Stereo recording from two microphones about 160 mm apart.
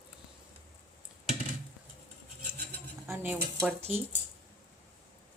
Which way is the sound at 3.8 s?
40° right (ahead or behind).